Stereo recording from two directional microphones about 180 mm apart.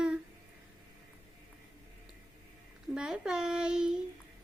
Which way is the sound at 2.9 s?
5° right (ahead or behind).